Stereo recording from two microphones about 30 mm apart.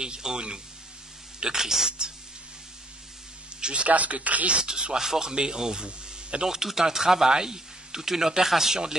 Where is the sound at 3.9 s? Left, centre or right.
Right.